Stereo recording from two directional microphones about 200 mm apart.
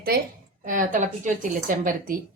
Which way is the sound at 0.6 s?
40° right (ahead or behind).